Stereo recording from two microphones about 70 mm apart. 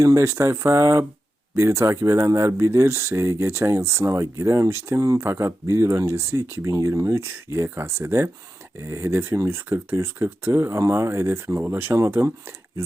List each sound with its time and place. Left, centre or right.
0.0 s speech: right